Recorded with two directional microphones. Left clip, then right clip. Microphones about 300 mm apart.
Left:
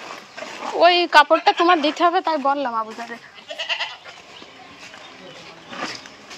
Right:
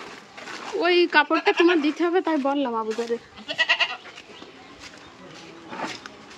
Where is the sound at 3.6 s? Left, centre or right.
Right.